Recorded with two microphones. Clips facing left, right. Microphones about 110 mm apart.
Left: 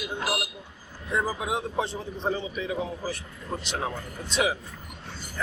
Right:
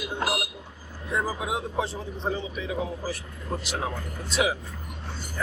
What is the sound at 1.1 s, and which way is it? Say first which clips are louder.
A man's voice: left 1 dB; 5° right (ahead or behind).